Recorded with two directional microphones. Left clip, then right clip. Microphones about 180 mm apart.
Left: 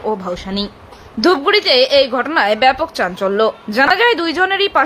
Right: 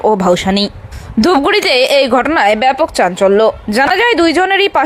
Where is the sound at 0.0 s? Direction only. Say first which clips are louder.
Right 10 dB; 45° right (ahead or behind).